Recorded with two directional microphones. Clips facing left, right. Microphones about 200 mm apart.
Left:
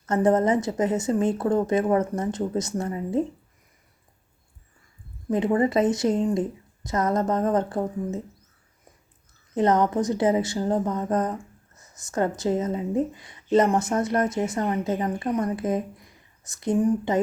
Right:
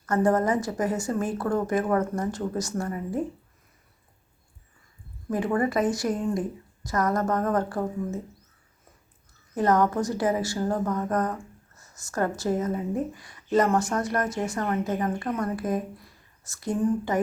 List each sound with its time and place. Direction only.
0.0 s a woman's voice: 20° left (ahead or behind)
5.3 s a woman's voice: 20° left (ahead or behind)
9.6 s a woman's voice: 20° left (ahead or behind)